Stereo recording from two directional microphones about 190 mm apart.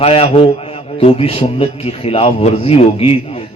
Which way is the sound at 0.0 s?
30° left (ahead or behind).